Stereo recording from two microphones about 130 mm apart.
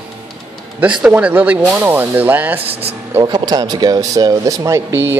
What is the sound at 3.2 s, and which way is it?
Speech, 30° right (ahead or behind).